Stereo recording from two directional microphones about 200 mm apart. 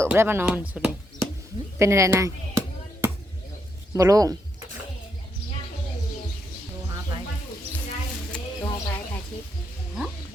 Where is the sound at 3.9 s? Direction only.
15° right (ahead or behind).